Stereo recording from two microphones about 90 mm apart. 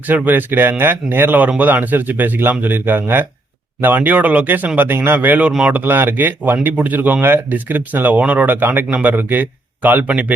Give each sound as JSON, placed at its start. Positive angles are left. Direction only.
{"t": 0.1, "sound": "speech", "side_deg": -20}
{"t": 5.8, "sound": "speech", "side_deg": -25}